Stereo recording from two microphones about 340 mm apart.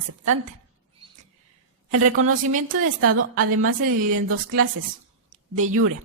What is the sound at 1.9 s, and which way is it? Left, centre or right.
A woman's voice, right.